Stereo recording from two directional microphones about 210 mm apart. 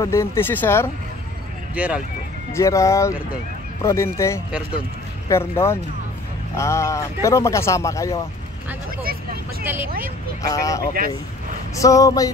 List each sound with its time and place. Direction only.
0.0 s speech: 15° left (ahead or behind)
1.8 s speech: 5° right (ahead or behind)
2.5 s speech: 15° left (ahead or behind)
10.4 s speech: 15° left (ahead or behind)